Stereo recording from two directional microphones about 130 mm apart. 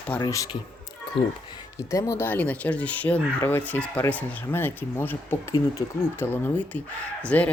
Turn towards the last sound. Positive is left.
turn(degrees=10)  # may be behind; listen again after turning